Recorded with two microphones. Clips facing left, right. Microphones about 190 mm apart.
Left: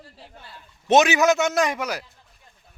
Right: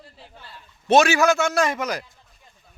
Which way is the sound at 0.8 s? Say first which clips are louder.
Even; 20° left (ahead or behind).